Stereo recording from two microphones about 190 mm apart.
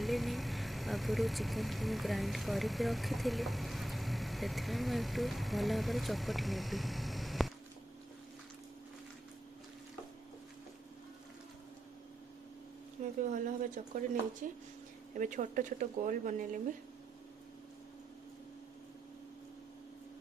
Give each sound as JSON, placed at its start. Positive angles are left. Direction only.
{"t": 0.0, "sound": "speech", "side_deg": 0}
{"t": 13.3, "sound": "a sound", "side_deg": -45}
{"t": 14.4, "sound": "speech", "side_deg": -45}